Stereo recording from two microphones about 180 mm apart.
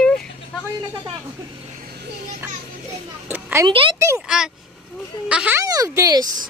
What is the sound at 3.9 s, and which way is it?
Speech, 15° right (ahead or behind).